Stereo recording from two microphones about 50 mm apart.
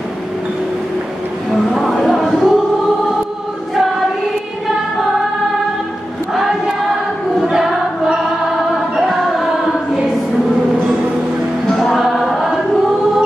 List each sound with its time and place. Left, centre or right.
1.5 s music: centre
7.4 s choir: centre
11.7 s music: centre
12.0 s choir: centre